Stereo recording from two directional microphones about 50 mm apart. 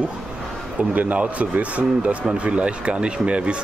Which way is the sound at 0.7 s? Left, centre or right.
Right.